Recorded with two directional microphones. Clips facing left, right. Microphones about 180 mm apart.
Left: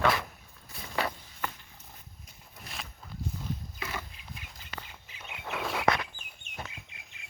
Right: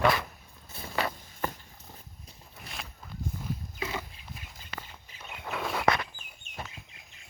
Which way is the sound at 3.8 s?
20° right (ahead or behind).